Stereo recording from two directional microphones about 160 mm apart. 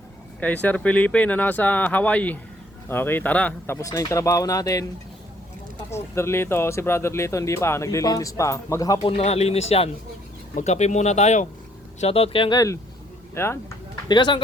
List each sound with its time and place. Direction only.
0.3 s speech: 10° left (ahead or behind)
5.9 s speech: 15° left (ahead or behind)
9.0 s speech: 40° left (ahead or behind); by 13.7 s 15° left (ahead or behind)
14.1 s speech: 30° left (ahead or behind)